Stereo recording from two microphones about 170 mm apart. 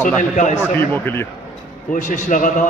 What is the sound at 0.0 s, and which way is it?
Speech, 45° left (ahead or behind).